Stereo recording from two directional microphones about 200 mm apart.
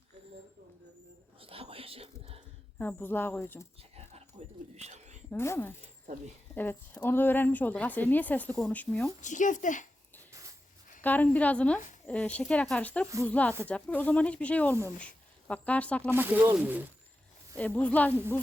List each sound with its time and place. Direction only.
1.4 s whispering: 30° right (ahead or behind)
2.7 s a woman's voice: 10° left (ahead or behind)
3.9 s a sound: 35° right (ahead or behind)
5.3 s a woman's voice: 10° left (ahead or behind)
9.2 s speech: 40° left (ahead or behind)
11.0 s a woman's voice: 10° left (ahead or behind)
16.0 s speech: 10° right (ahead or behind)
17.6 s a woman's voice: 5° left (ahead or behind)